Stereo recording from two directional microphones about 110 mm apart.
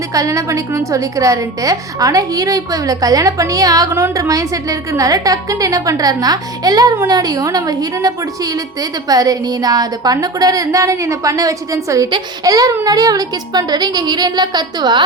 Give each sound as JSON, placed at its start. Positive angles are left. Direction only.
{"t": 0.1, "sound": "a woman's voice", "side_deg": -30}